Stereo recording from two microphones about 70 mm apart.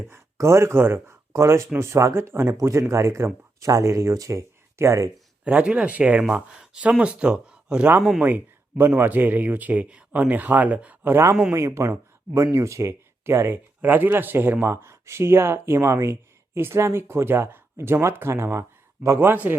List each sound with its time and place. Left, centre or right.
0.1 s speech: right
1.3 s speech: right
2.5 s speech: right
5.5 s speech: centre
9.0 s speech: right
11.0 s speech: right
11.5 s speech: right